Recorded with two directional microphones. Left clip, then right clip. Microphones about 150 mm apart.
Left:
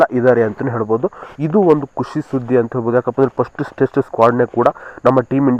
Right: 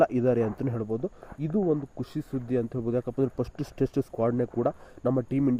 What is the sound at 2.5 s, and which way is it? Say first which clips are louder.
Speech: left 14 dB; 45° right (ahead or behind).